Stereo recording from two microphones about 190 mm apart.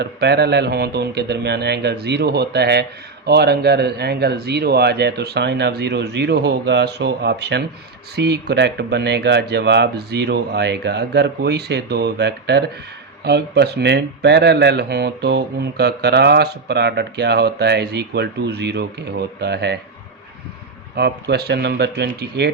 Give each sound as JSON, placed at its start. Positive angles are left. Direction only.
{"t": 0.0, "sound": "speech", "side_deg": -60}
{"t": 20.9, "sound": "speech", "side_deg": -60}